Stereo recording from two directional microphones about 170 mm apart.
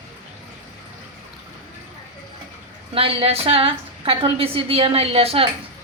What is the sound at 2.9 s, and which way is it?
A woman's voice, 35° right (ahead or behind).